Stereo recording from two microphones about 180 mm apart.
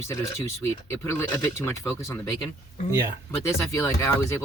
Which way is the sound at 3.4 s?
15° left (ahead or behind).